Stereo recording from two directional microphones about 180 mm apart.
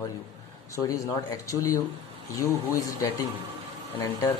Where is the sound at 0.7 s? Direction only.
20° left (ahead or behind).